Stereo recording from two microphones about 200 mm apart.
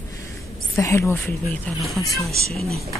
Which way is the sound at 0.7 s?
15° left (ahead or behind).